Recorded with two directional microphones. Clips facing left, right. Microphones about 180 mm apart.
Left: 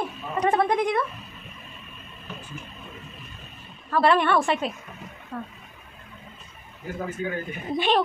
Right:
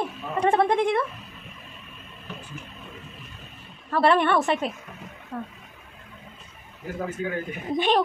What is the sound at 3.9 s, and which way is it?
Speech, 25° right (ahead or behind).